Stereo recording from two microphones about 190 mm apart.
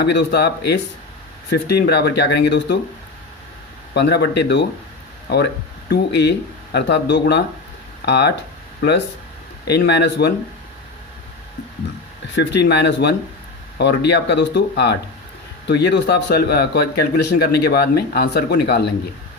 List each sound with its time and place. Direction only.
0.0 s speech: 60° left (ahead or behind)
3.9 s speech: 65° left (ahead or behind)
6.7 s speech: 65° left (ahead or behind)
9.6 s speech: 60° left (ahead or behind)
12.3 s speech: 65° left (ahead or behind)